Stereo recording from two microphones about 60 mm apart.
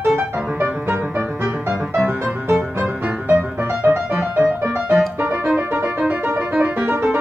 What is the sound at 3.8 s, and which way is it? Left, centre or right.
Music, right.